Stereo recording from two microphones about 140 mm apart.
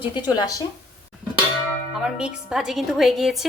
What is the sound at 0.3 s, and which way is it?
Speech, 25° left (ahead or behind).